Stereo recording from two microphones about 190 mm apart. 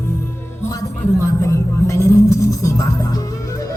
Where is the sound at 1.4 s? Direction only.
15° left (ahead or behind).